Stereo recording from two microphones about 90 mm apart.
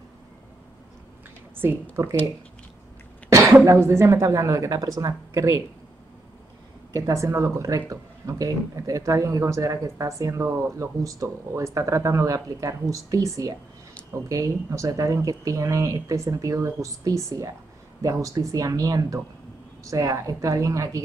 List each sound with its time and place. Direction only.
1.6 s a woman's voice: 25° right (ahead or behind)
3.3 s cough: 30° right (ahead or behind)
3.6 s speech: 30° right (ahead or behind)
6.9 s speech: 35° right (ahead or behind)